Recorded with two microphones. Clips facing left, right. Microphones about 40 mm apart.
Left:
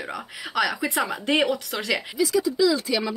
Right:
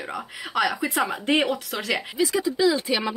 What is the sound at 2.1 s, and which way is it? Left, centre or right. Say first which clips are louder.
Speech: left 1 dB; right.